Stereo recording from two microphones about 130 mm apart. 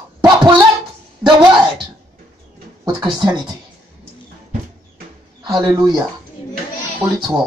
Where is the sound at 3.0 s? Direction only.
35° right (ahead or behind).